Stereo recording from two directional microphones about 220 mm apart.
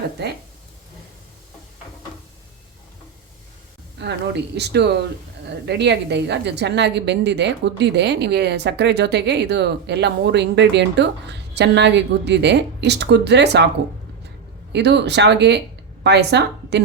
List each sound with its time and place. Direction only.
4.0 s a sound: 50° right (ahead or behind)
4.5 s a woman's voice: 50° right (ahead or behind)
14.7 s a woman's voice: 50° right (ahead or behind)